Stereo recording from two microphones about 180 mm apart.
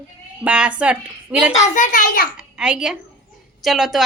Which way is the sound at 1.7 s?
45° left (ahead or behind).